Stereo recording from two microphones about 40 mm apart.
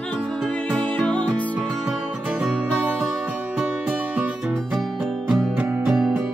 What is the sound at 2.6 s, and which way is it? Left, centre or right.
Music, right.